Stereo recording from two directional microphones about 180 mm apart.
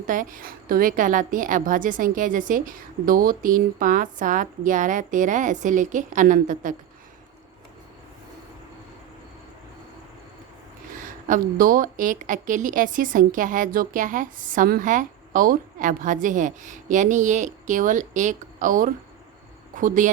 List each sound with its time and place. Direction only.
0.1 s a woman's voice: 50° right (ahead or behind)
11.3 s a woman's voice: 50° right (ahead or behind)